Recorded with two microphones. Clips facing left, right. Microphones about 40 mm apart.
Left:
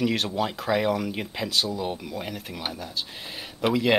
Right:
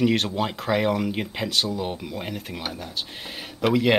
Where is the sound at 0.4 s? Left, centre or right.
Centre.